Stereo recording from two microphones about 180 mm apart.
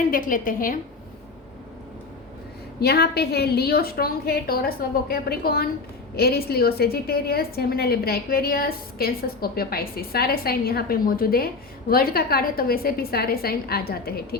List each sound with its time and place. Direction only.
0.1 s a woman's voice: 50° left (ahead or behind)
2.8 s a woman's voice: 60° left (ahead or behind)